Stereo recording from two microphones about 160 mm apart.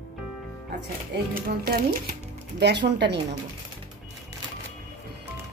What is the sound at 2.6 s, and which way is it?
Speech, 90° right.